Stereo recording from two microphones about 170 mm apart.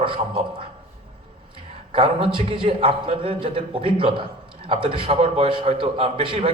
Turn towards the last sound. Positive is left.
turn(degrees=-30)  # may be behind; listen again after turning